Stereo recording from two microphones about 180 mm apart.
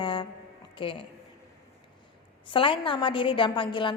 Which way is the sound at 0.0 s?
25° left (ahead or behind).